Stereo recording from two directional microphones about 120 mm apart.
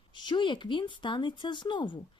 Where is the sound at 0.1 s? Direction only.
40° left (ahead or behind).